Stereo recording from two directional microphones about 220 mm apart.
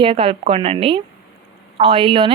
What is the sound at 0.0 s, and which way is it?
A woman's voice, 25° right (ahead or behind).